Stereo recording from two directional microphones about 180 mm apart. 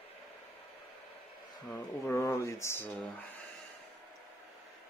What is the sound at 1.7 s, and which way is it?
Speech, 10° left (ahead or behind).